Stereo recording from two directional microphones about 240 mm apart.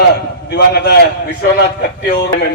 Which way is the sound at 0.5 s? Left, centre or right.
Left.